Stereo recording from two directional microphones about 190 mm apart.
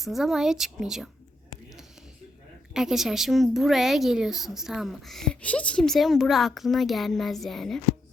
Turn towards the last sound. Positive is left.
turn(degrees=0)  # may be behind; listen again after turning